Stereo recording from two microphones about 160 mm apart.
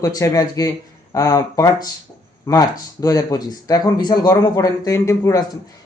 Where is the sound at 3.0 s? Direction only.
20° left (ahead or behind).